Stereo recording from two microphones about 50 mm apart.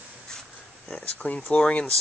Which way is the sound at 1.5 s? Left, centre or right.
Centre.